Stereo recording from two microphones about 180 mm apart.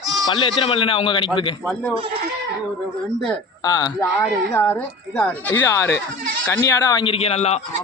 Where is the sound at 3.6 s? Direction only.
20° left (ahead or behind).